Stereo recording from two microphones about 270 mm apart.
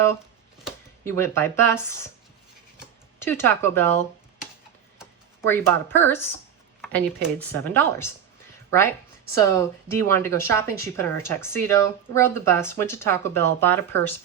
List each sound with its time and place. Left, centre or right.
0.6 s speech: centre
3.2 s speech: centre
5.5 s a woman's voice: centre